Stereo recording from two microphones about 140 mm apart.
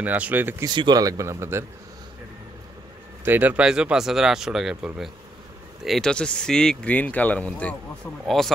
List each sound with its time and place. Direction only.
0.0 s speech: 10° right (ahead or behind)
0.7 s speech: 30° right (ahead or behind)
3.3 s speech: 10° right (ahead or behind); by 7.7 s 10° left (ahead or behind)